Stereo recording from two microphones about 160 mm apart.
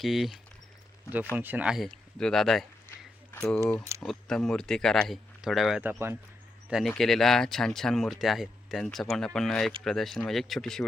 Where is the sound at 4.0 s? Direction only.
5° left (ahead or behind).